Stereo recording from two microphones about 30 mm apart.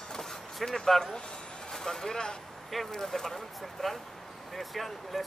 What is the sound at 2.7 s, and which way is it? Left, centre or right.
Speech, centre.